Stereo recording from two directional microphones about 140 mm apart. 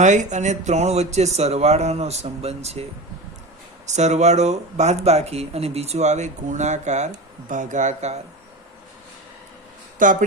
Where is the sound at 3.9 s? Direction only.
55° right (ahead or behind).